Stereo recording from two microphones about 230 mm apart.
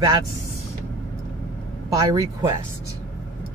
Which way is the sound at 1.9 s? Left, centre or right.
Centre.